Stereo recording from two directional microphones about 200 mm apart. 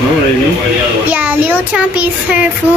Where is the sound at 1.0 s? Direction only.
10° right (ahead or behind).